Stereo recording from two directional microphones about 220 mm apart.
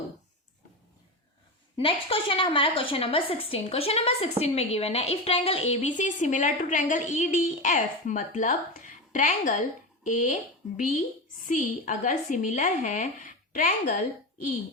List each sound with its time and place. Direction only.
1.7 s a woman's voice: 25° left (ahead or behind)